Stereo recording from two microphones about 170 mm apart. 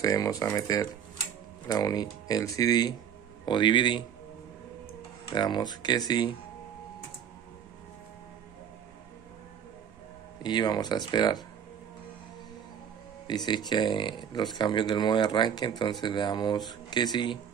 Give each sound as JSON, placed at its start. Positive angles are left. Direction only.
{"t": 0.0, "sound": "speech", "side_deg": 20}
{"t": 5.3, "sound": "speech", "side_deg": 25}
{"t": 10.4, "sound": "speech", "side_deg": 25}
{"t": 13.5, "sound": "speech", "side_deg": 25}